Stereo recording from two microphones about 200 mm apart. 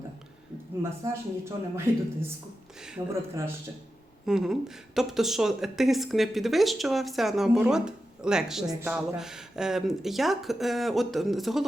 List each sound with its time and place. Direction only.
0.8 s speech: 15° right (ahead or behind)
4.3 s a woman's voice: centre (ahead or behind)